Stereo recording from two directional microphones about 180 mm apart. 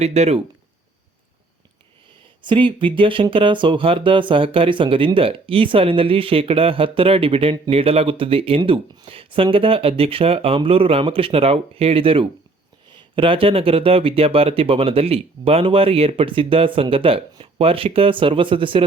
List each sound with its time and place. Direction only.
0.0 s speech: 35° right (ahead or behind)
2.4 s speech: 25° right (ahead or behind)